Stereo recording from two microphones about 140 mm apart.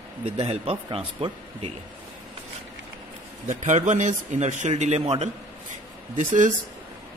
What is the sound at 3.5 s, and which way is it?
Speech, 60° right (ahead or behind).